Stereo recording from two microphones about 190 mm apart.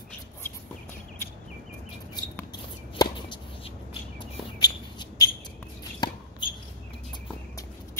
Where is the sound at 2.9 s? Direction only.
25° left (ahead or behind).